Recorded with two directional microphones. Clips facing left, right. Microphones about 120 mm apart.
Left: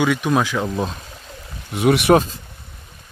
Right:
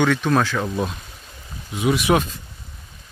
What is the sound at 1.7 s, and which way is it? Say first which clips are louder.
Speech: left 4 dB; 60° left (ahead or behind).